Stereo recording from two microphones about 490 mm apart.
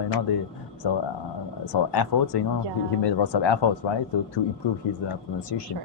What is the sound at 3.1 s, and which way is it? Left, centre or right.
Speech, left.